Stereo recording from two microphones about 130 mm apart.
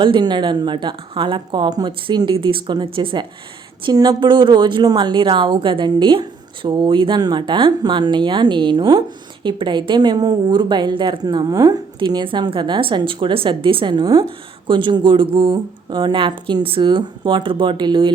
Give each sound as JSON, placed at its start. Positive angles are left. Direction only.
{"t": 0.0, "sound": "a woman's voice", "side_deg": -35}